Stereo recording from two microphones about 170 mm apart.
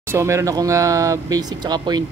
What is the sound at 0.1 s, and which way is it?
Speech, 15° right (ahead or behind).